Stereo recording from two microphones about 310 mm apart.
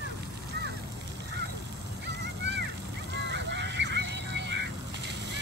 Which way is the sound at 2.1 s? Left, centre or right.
Right.